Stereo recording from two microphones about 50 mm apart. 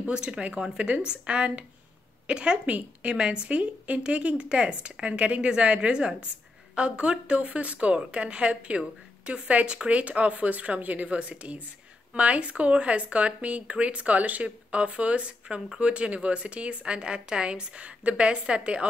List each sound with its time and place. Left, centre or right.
0.1 s speech: centre